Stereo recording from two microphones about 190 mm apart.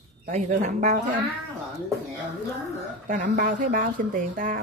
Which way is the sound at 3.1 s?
50° right (ahead or behind).